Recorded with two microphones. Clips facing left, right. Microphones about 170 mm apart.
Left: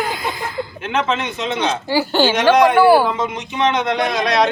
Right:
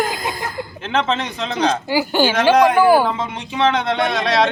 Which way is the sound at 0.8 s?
30° right (ahead or behind).